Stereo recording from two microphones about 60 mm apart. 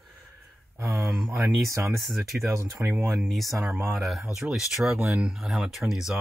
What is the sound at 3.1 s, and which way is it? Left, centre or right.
Speech, centre.